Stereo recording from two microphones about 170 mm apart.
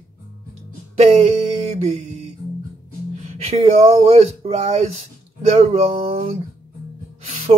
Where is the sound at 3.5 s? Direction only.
35° right (ahead or behind).